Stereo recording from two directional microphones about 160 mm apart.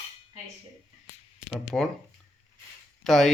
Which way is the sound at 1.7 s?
10° left (ahead or behind).